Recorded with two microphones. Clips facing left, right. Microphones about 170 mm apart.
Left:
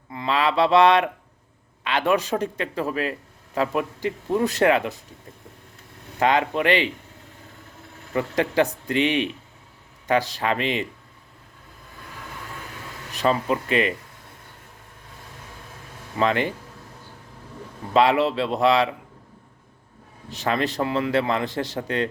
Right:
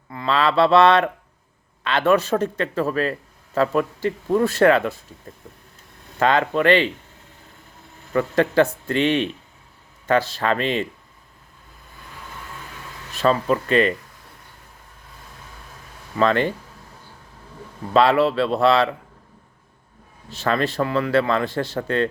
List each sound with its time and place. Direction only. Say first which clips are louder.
0.1 s speech: right 2 dB; 15° left (ahead or behind)
6.1 s speech: right 2 dB; 15° left (ahead or behind)
8.1 s speech: right 4 dB; 15° left (ahead or behind)
13.1 s speech: right 3 dB; 15° left (ahead or behind)
16.1 s speech: right 3 dB; 15° left (ahead or behind)
17.9 s speech: right 2 dB; 15° left (ahead or behind)
20.3 s speech: right 2 dB; 15° left (ahead or behind)